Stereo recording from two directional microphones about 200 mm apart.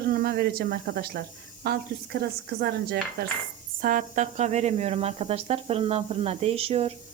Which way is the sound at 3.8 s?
40° right (ahead or behind).